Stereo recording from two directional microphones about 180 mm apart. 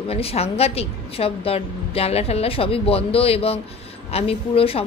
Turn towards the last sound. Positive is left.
turn(degrees=30)  # may be behind; listen again after turning